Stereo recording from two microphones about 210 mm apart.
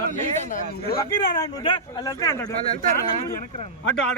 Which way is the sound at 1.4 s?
20° left (ahead or behind).